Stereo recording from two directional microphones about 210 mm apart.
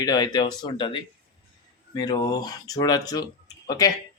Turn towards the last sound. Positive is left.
turn(degrees=20)  # may be behind; listen again after turning